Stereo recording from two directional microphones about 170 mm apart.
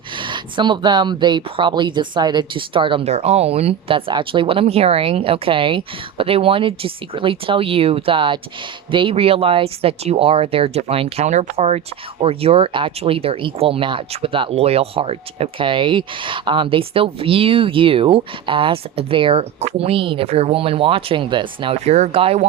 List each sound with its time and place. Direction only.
0.2 s speech: 30° right (ahead or behind)